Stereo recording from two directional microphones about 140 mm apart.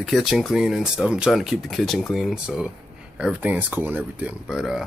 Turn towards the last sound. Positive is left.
turn(degrees=-5)  # may be behind; listen again after turning